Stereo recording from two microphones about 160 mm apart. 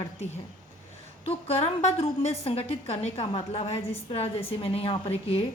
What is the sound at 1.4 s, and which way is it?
A woman's voice, 40° left (ahead or behind).